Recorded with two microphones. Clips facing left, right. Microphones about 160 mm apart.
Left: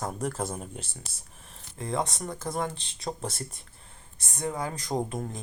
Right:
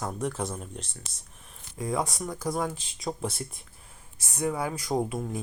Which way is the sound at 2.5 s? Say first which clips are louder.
Right 1 dB; 5° right (ahead or behind).